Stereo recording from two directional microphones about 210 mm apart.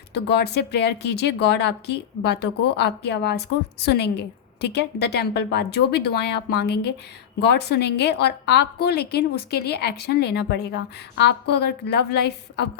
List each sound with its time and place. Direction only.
0.1 s a woman's voice: 50° left (ahead or behind)